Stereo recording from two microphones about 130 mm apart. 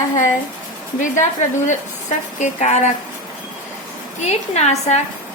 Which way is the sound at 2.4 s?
60° left (ahead or behind).